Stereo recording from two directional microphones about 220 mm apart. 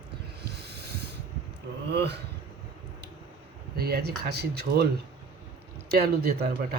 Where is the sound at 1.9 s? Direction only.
50° right (ahead or behind).